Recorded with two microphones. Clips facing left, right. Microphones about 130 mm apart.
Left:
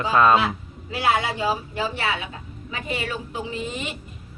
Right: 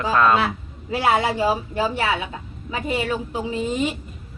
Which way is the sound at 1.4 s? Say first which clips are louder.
Right 4 dB; 40° right (ahead or behind).